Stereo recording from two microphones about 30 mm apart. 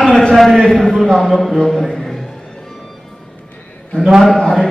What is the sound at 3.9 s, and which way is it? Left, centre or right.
Speech, left.